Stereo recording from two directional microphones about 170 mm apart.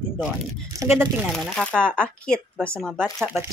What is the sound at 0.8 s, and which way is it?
Speech, 15° right (ahead or behind).